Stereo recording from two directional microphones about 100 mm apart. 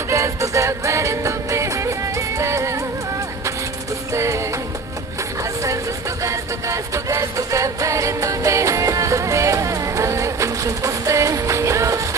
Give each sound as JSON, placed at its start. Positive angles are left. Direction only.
{"t": 0.1, "sound": "music", "side_deg": -30}
{"t": 4.1, "sound": "music", "side_deg": -30}
{"t": 5.4, "sound": "a sound", "side_deg": -30}
{"t": 6.2, "sound": "music", "side_deg": -30}